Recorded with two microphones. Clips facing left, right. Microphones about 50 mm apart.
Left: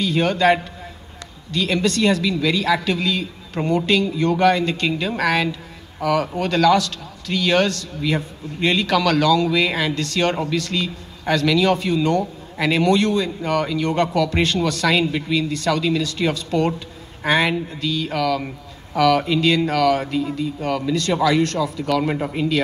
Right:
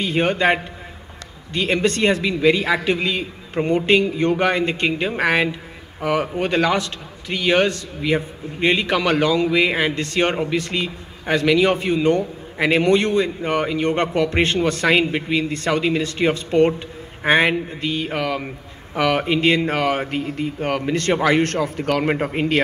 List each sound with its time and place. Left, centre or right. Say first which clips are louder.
0.0 s a man's voice: left 1 dB; right